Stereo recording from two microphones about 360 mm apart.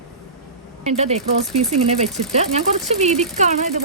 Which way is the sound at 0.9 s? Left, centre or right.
Centre.